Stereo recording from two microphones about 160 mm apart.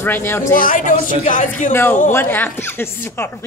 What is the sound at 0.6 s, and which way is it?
Speech, 55° left (ahead or behind).